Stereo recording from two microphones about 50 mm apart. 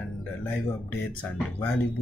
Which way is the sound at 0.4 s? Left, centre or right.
Left.